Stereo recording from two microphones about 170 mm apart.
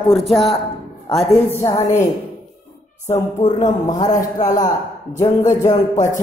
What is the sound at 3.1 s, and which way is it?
Speech, 45° left (ahead or behind).